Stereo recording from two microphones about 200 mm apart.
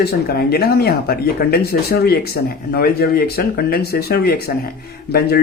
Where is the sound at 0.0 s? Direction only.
50° left (ahead or behind).